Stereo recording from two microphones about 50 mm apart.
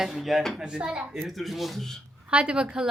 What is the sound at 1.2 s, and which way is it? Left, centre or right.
Speech, centre.